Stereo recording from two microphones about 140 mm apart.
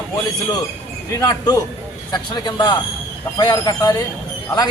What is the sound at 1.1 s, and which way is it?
Speech, 25° left (ahead or behind).